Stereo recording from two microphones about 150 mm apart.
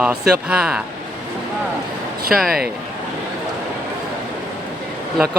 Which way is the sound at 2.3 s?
Centre (ahead or behind).